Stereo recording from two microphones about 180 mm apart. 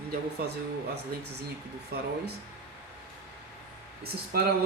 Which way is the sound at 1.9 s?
60° right (ahead or behind).